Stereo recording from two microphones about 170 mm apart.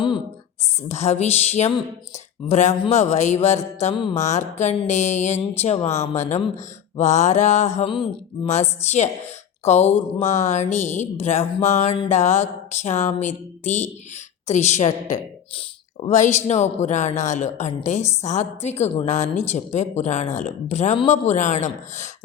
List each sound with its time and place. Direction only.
0.9 s a woman's voice: 40° left (ahead or behind)
3.9 s a woman's voice: 30° left (ahead or behind)
4.2 s a woman's voice: 45° left (ahead or behind)
7.8 s a woman's voice: 30° left (ahead or behind)
10.2 s a woman's voice: 45° left (ahead or behind)